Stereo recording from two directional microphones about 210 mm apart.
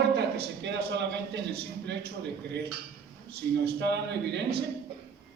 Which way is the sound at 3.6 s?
50° right (ahead or behind).